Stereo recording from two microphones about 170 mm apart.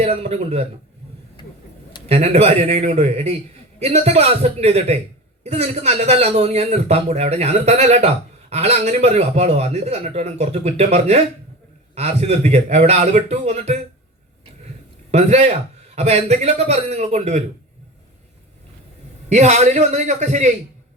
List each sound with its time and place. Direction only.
0.0 s a man's voice: 35° right (ahead or behind)
2.0 s a man's voice: 35° right (ahead or behind)
15.1 s a man's voice: 40° right (ahead or behind)
19.3 s a man's voice: 40° right (ahead or behind)